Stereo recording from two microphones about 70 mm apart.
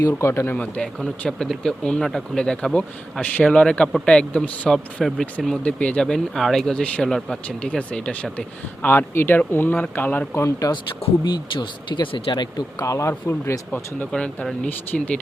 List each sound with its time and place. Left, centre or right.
0.2 s speech: left
0.5 s speech: centre
4.7 s speech: centre
5.6 s a man's voice: centre
10.3 s speech: left
11.2 s speech: left
12.8 s speech: left
14.1 s speech: centre